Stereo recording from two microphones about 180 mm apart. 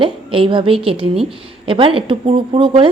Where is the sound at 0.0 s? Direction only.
30° right (ahead or behind).